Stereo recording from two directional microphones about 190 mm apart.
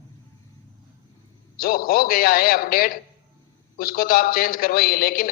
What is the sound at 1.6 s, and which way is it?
A man's voice, 50° left (ahead or behind).